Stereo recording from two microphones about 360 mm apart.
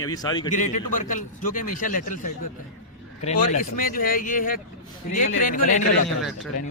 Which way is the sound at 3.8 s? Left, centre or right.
Left.